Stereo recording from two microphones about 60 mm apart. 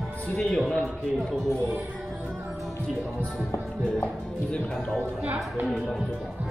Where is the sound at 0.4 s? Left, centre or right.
Centre.